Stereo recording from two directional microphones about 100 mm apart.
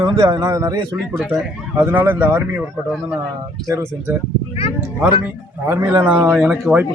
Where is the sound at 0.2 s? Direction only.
35° right (ahead or behind).